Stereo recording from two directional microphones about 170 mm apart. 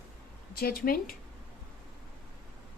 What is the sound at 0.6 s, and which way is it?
Speech, 60° left (ahead or behind).